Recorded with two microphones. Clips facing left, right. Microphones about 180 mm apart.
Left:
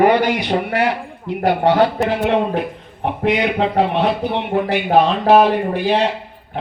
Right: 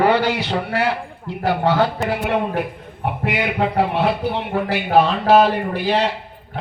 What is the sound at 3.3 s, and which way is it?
Speech, 25° left (ahead or behind).